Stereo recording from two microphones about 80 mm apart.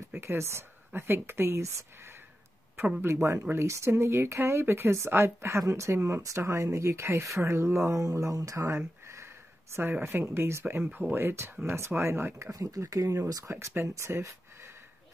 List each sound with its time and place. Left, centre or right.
0.2 s speech: right
12.4 s speech: right